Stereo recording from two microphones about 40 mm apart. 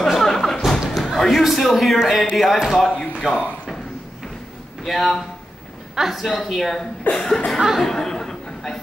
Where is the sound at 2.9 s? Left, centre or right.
Left.